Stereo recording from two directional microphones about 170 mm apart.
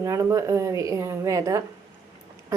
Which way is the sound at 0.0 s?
20° right (ahead or behind).